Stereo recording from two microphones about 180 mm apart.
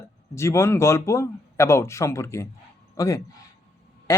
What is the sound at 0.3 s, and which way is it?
Speech, 15° left (ahead or behind).